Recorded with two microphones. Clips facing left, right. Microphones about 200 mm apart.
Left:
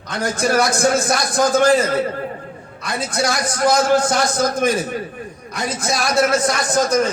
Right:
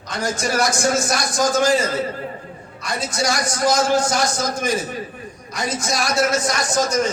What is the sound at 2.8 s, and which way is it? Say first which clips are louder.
A man's voice: left 2 dB; 55° left (ahead or behind).